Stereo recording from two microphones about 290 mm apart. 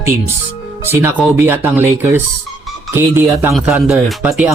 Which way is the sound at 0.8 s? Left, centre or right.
Centre.